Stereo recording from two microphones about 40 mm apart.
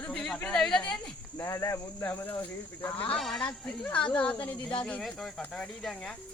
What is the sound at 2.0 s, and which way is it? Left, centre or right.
Speech, left.